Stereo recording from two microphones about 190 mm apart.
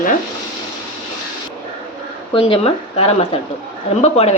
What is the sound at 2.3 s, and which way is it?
A woman's voice, 30° left (ahead or behind).